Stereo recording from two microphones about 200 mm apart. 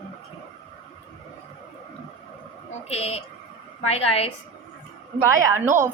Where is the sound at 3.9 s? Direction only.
30° left (ahead or behind).